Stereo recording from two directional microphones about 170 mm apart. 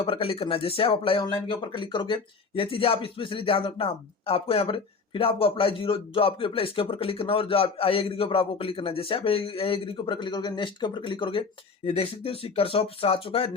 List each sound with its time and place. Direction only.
0.0 s speech: 35° left (ahead or behind)